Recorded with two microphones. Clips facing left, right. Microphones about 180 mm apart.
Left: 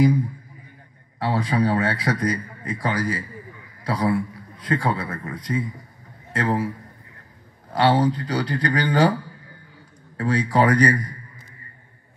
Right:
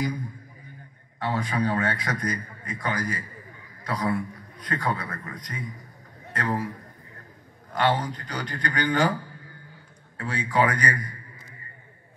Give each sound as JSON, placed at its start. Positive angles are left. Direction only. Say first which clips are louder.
{"t": 1.2, "sound": "a man's voice", "louder": "left 5 dB", "side_deg": 30}
{"t": 7.7, "sound": "a man's voice", "louder": "left 6 dB", "side_deg": 30}
{"t": 10.1, "sound": "a man's voice", "louder": "left 5 dB", "side_deg": 40}